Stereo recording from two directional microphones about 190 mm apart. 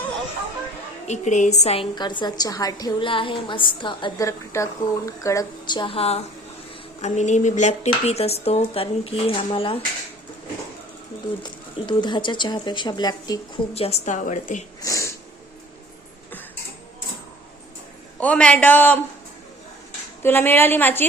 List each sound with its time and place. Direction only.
1.0 s a woman's voice: 35° left (ahead or behind)
11.4 s a woman's voice: 25° left (ahead or behind)
13.7 s speech: 35° left (ahead or behind)
14.8 s speech: 15° left (ahead or behind)
18.2 s a woman's voice: 5° left (ahead or behind)
20.2 s a woman's voice: 10° left (ahead or behind)